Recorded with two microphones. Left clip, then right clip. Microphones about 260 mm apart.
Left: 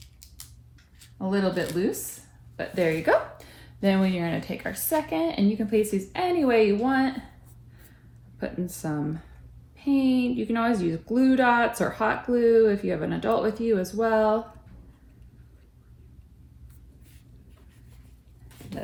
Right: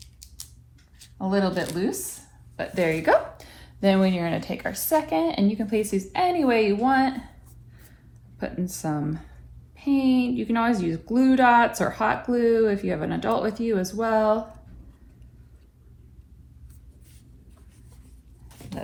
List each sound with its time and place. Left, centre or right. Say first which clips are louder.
0.0 s scissors: right 4 dB; centre
1.2 s speech: right 1 dB; centre
8.4 s speech: right 1 dB; centre